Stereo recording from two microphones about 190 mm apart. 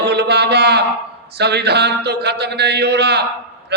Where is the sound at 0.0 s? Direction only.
60° right (ahead or behind).